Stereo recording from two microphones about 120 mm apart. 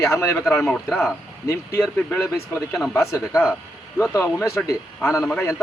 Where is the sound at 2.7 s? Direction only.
Centre (ahead or behind).